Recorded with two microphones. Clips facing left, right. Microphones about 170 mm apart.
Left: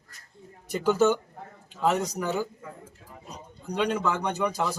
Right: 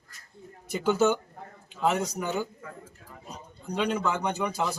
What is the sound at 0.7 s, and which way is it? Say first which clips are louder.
Speech: left 1 dB; 5° right (ahead or behind).